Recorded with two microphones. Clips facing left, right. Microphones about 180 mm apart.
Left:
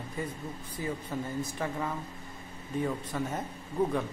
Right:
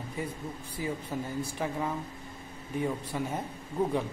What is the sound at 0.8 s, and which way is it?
Speech, 10° right (ahead or behind).